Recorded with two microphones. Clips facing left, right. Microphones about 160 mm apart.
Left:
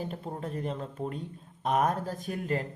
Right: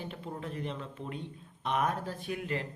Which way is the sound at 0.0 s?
40° left (ahead or behind).